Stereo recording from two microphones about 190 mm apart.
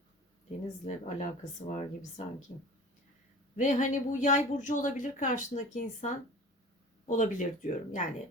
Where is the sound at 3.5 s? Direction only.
40° left (ahead or behind).